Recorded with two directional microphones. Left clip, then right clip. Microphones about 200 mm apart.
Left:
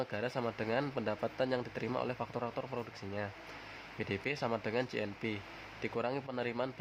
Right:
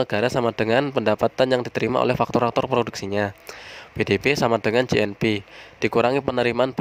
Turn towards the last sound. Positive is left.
turn(degrees=-55)  # may be behind; listen again after turning